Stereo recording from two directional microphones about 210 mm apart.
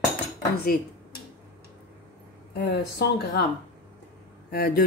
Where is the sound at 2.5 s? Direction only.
50° left (ahead or behind).